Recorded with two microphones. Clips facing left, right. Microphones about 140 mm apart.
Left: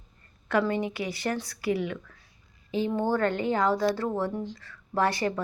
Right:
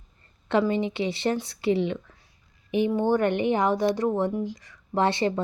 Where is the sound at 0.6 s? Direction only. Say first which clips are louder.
Right 3 dB; 20° right (ahead or behind).